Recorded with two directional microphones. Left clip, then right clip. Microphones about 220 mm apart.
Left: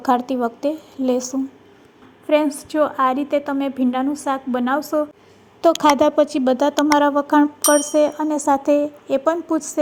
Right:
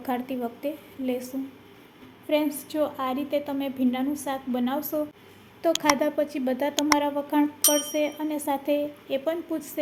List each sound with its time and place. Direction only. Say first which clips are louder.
0.0 s a woman's voice: left 11 dB; 25° left (ahead or behind)
6.7 s speech: left 7 dB; centre (ahead or behind)
7.0 s a woman's voice: left 9 dB; 30° left (ahead or behind)